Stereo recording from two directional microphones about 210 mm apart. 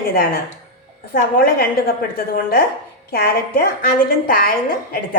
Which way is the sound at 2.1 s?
45° left (ahead or behind).